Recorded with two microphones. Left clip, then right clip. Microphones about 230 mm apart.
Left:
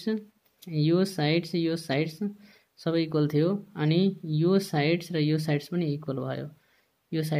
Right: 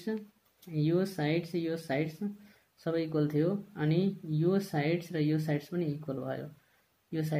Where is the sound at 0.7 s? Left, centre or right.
Left.